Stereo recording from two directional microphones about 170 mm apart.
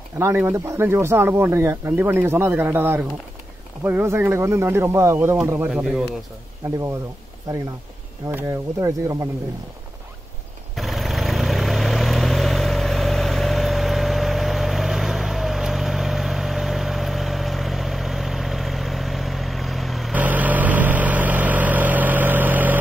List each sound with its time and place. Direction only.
0.2 s speech: 15° right (ahead or behind)
8.3 s speech: 15° right (ahead or behind)
10.8 s vehicle: centre (ahead or behind)